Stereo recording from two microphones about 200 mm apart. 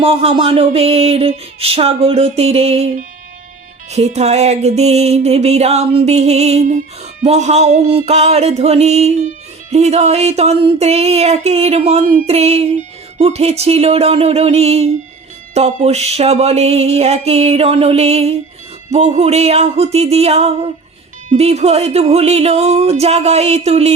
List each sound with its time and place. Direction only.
0.0 s music: 30° right (ahead or behind)